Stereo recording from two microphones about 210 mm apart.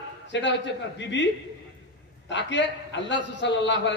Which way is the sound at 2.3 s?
55° left (ahead or behind).